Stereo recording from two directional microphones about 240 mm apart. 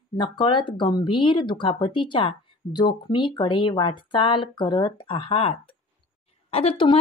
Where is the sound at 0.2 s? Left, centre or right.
Centre.